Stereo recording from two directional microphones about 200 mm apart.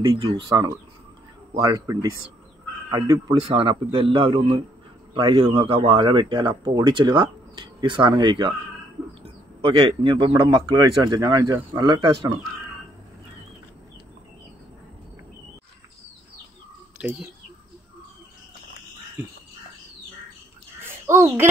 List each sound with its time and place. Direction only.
0.0 s a man's voice: 20° right (ahead or behind)
20.8 s bird: 10° right (ahead or behind)